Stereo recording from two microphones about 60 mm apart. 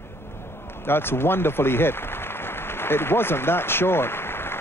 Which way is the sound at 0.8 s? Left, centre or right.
Left.